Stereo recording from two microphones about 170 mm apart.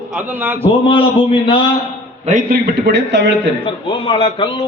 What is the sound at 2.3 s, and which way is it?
Speech, 55° right (ahead or behind).